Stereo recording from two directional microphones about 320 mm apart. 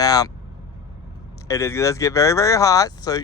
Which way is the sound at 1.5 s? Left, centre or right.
Centre.